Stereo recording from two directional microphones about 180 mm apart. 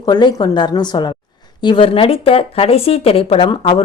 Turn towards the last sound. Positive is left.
turn(degrees=25)  # may be behind; listen again after turning